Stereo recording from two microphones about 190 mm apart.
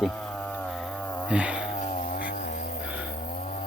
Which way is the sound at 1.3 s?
5° right (ahead or behind).